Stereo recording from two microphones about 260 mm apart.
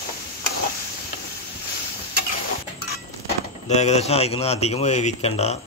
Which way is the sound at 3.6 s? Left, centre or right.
Left.